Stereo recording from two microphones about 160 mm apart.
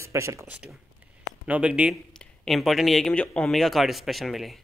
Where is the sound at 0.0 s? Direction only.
15° right (ahead or behind).